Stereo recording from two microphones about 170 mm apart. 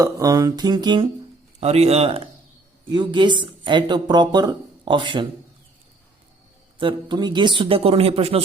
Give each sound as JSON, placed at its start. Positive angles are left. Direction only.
{"t": 0.0, "sound": "speech", "side_deg": -20}
{"t": 1.6, "sound": "a man's voice", "side_deg": -40}
{"t": 2.9, "sound": "speech", "side_deg": -25}
{"t": 6.7, "sound": "a man's voice", "side_deg": -30}